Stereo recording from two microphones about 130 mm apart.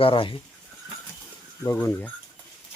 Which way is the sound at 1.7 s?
15° left (ahead or behind).